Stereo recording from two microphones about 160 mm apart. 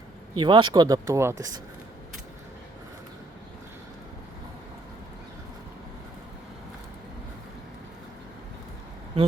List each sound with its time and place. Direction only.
0.3 s speech: 30° right (ahead or behind)